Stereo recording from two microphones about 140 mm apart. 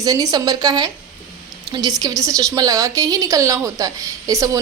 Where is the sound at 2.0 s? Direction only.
25° right (ahead or behind).